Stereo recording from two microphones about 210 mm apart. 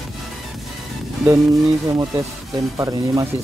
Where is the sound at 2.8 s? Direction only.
15° right (ahead or behind).